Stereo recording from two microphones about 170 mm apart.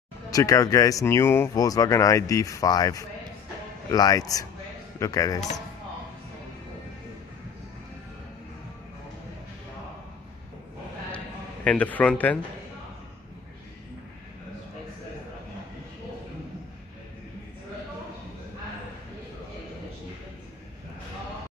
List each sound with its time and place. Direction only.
0.3 s speech: 20° left (ahead or behind)
11.6 s a man's voice: 10° left (ahead or behind)